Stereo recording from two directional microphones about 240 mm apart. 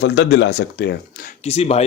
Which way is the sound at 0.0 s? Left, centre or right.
Left.